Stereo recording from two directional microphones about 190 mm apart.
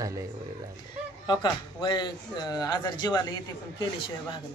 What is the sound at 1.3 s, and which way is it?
Speech, 25° left (ahead or behind).